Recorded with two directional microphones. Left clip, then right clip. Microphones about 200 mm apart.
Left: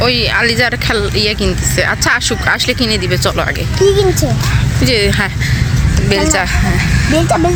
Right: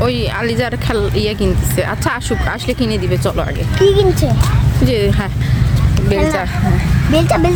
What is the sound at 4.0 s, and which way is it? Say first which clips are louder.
Speech: left 1 dB; 10° left (ahead or behind).